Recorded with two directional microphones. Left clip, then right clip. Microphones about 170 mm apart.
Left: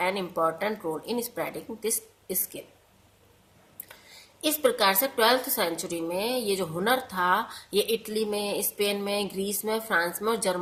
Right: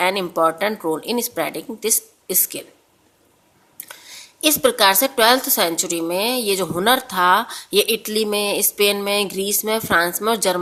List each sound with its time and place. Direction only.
0.0 s a woman's voice: 40° right (ahead or behind)
4.4 s a woman's voice: 40° right (ahead or behind)